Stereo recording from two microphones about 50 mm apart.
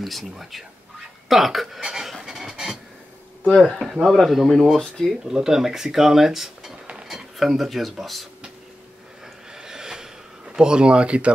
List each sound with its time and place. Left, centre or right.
0.0 s speech: centre
2.1 s a sound: centre
3.6 s speech: centre
5.1 s speech: centre
9.5 s gasp: centre